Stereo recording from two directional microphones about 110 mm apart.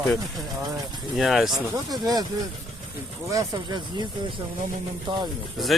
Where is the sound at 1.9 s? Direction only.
35° right (ahead or behind).